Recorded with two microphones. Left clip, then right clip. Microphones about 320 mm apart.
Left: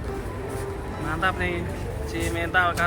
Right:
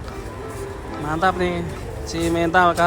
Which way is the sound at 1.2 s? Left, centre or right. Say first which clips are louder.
Right 5 dB; centre.